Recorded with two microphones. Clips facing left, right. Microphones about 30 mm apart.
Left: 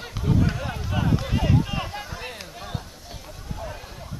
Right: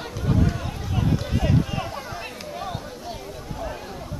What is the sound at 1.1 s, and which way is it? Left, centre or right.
Run, centre.